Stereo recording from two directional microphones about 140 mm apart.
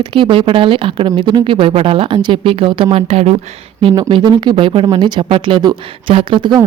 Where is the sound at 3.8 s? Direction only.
35° right (ahead or behind).